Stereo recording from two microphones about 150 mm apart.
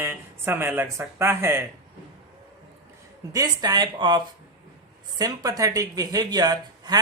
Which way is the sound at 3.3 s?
25° right (ahead or behind).